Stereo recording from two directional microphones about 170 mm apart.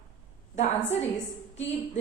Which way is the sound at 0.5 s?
45° left (ahead or behind).